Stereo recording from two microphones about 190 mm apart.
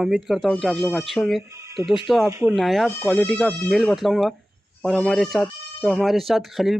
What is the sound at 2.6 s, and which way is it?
Speech, centre (ahead or behind).